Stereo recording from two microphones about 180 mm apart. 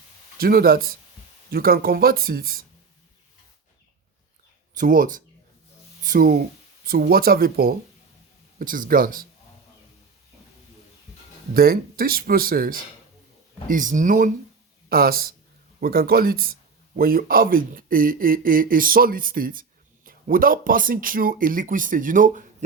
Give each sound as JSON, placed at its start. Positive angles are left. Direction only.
{"t": 0.3, "sound": "speech", "side_deg": -55}
{"t": 4.8, "sound": "speech", "side_deg": -50}
{"t": 11.5, "sound": "speech", "side_deg": -55}
{"t": 14.8, "sound": "speech", "side_deg": -55}